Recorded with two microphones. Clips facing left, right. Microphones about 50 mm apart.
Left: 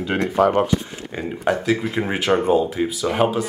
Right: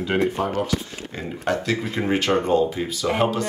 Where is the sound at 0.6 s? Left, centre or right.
Centre.